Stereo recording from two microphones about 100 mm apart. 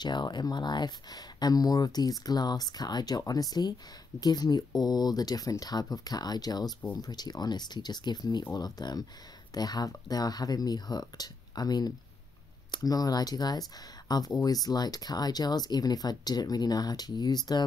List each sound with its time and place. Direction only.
0.0 s speech: 45° left (ahead or behind)